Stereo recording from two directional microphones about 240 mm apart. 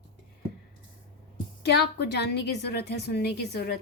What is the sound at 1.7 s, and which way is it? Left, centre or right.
A woman's voice, left.